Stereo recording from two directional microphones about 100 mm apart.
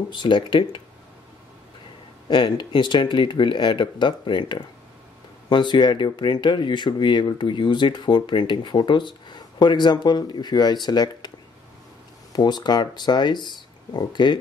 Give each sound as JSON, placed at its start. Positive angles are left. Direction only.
{"t": 0.1, "sound": "speech", "side_deg": 55}
{"t": 2.2, "sound": "speech", "side_deg": 55}